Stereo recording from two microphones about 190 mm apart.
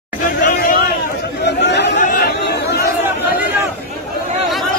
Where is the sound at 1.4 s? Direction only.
65° left (ahead or behind).